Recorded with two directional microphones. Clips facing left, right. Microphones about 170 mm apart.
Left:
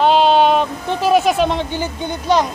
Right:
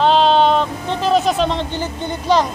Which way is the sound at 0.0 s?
10° left (ahead or behind).